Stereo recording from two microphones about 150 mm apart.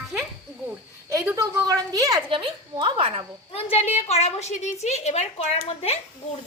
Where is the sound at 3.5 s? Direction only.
45° left (ahead or behind).